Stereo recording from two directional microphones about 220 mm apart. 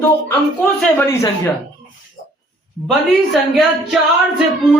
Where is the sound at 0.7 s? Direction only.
10° left (ahead or behind).